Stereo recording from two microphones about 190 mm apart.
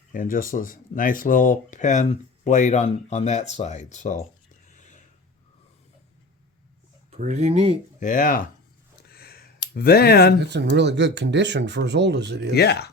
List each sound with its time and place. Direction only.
0.1 s speech: 45° left (ahead or behind)
7.1 s speech: 40° right (ahead or behind)
7.9 s speech: 45° left (ahead or behind)
9.0 s a sound: 55° left (ahead or behind)
9.7 s speech: 55° left (ahead or behind)
10.5 s speech: 65° right (ahead or behind)
12.5 s speech: 60° left (ahead or behind)